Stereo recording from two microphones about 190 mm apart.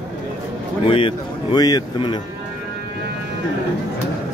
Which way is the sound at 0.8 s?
30° left (ahead or behind).